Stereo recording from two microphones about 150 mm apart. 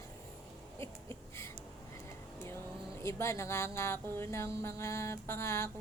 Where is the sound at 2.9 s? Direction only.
15° left (ahead or behind).